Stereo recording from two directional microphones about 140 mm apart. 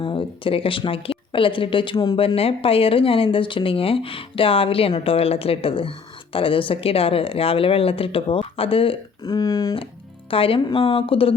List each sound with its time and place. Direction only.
0.0 s speech: 35° left (ahead or behind)
2.1 s speech: 45° left (ahead or behind); by 9.7 s 25° left (ahead or behind)
10.2 s speech: 40° left (ahead or behind)